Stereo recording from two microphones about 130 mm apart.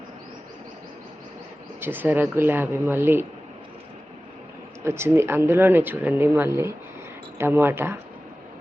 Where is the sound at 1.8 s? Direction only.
15° right (ahead or behind).